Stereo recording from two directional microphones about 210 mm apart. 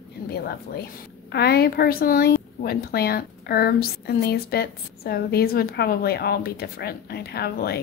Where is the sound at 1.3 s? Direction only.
50° left (ahead or behind).